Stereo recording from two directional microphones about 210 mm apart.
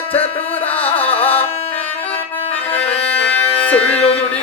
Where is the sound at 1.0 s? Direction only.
25° left (ahead or behind).